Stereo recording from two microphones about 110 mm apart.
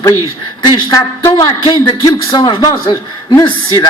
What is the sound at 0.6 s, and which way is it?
A man's voice, 35° left (ahead or behind).